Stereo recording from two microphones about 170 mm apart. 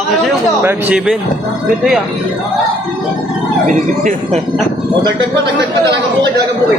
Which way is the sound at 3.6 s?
45° right (ahead or behind).